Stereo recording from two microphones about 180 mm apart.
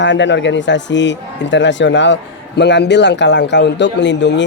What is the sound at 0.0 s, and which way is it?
A man's voice, 85° left.